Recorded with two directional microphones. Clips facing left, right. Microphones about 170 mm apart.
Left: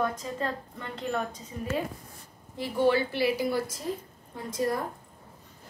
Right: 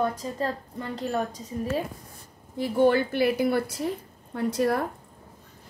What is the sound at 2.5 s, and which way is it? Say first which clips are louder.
A woman's voice: right 4 dB; 50° right (ahead or behind).